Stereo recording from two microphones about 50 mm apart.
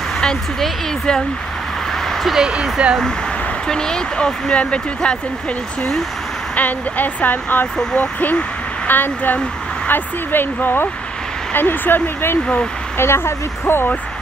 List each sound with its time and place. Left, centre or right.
0.2 s speech: centre
2.4 s speech: centre
3.6 s speech: centre
6.5 s speech: left